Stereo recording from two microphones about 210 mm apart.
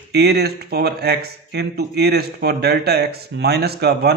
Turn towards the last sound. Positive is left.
turn(degrees=-50)  # may be behind; listen again after turning